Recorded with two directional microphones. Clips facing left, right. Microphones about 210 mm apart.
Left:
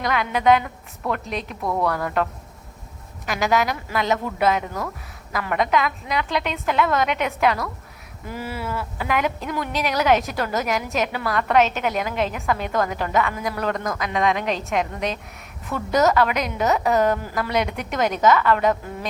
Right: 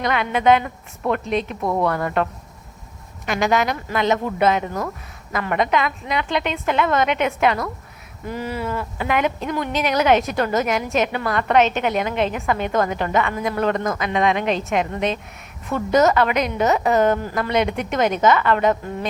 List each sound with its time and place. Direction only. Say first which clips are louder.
0.0 s speech: right 2 dB; centre (ahead or behind)
1.6 s speech: even; 20° right (ahead or behind)
1.9 s speech: right 2 dB; centre (ahead or behind)
3.2 s speech: right 2 dB; centre (ahead or behind)